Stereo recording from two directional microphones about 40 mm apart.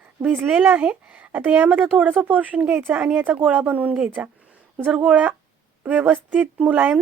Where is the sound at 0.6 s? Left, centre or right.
Right.